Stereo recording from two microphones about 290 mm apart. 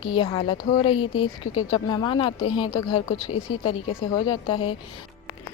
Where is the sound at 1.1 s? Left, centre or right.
Left.